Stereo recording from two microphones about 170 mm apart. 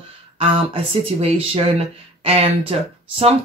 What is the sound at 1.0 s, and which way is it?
Speech, 35° right (ahead or behind).